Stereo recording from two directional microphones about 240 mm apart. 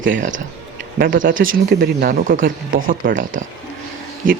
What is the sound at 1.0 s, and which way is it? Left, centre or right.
Speech, right.